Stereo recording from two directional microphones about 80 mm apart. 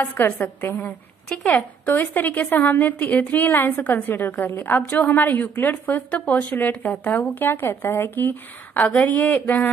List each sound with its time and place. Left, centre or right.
0.0 s a woman's voice: left